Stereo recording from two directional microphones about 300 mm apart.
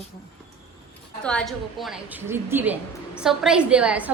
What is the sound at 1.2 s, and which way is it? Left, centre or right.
A woman's voice, centre.